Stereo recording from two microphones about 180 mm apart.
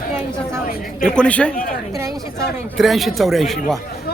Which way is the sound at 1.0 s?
5° left (ahead or behind).